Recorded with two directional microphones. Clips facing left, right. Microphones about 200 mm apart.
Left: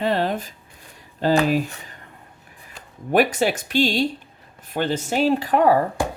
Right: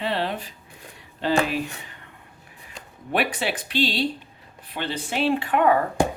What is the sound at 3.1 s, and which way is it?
Speech, 45° left (ahead or behind).